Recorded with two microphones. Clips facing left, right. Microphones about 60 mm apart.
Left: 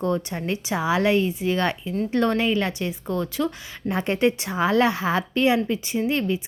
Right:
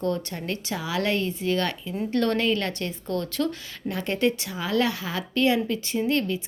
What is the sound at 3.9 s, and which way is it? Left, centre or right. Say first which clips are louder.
A woman's voice: left 3 dB; left.